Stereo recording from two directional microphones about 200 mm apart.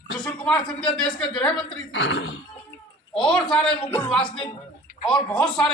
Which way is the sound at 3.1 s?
5° left (ahead or behind).